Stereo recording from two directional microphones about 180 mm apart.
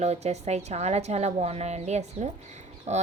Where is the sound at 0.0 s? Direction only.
40° right (ahead or behind).